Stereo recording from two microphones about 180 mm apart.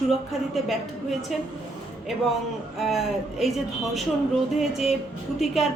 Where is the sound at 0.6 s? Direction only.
Centre (ahead or behind).